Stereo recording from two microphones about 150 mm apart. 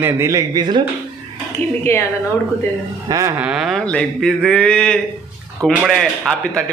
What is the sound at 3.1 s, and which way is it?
Speech, 25° right (ahead or behind).